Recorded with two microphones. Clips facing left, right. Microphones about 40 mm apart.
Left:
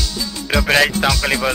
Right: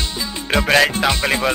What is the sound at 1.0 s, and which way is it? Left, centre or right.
Speech, centre.